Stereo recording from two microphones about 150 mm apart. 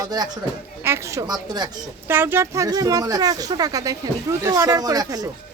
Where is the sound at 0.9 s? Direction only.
20° right (ahead or behind).